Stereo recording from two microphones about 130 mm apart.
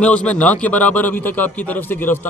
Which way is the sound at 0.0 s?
10° left (ahead or behind).